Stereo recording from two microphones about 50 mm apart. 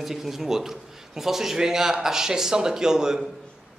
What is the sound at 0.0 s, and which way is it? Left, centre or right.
A man's voice, centre.